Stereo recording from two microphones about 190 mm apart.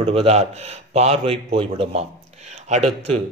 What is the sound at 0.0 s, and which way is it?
A man's voice, 30° right (ahead or behind).